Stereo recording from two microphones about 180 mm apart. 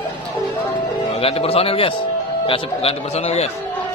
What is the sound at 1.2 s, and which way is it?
A man's voice, 30° left (ahead or behind).